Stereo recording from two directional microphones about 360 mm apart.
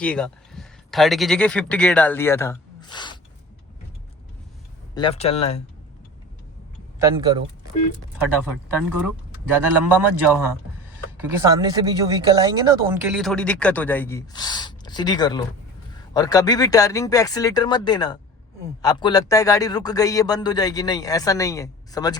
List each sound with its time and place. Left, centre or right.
0.0 s speech: centre
4.9 s a man's voice: centre
9.0 s a man's voice: centre